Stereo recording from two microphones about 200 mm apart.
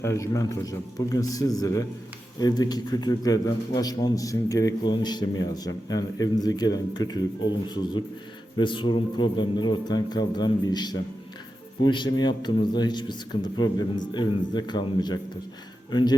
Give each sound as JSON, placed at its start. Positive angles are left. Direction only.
{"t": 0.0, "sound": "a man's voice", "side_deg": 15}